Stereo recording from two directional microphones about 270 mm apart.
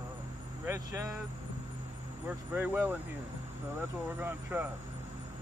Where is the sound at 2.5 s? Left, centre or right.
Centre.